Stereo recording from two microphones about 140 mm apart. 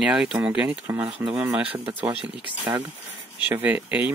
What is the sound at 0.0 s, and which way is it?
Speech, 5° right (ahead or behind).